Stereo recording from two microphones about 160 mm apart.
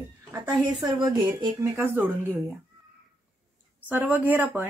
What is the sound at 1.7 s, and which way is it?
Speech, 15° right (ahead or behind).